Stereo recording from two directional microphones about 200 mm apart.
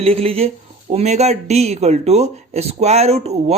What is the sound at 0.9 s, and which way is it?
Speech, 35° right (ahead or behind).